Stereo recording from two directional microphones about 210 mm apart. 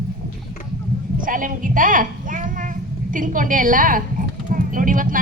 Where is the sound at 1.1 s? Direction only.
40° right (ahead or behind).